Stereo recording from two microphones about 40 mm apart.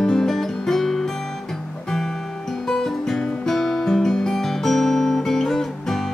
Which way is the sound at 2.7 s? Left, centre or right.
Centre.